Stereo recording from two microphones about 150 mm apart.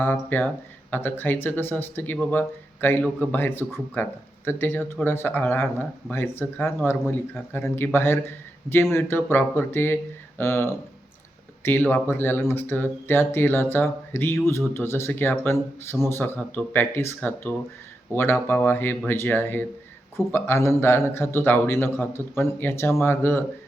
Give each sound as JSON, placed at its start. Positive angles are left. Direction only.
{"t": 0.0, "sound": "speech", "side_deg": 15}